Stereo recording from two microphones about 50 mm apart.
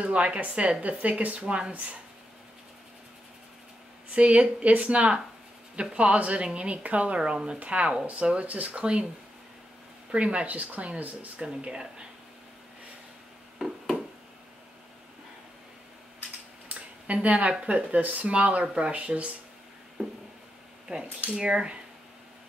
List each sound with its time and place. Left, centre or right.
0.0 s speech: right
4.1 s speech: right
10.1 s speech: right
11.4 s speech: centre
13.6 s a sound: centre
16.6 s speech: right
21.4 s speech: centre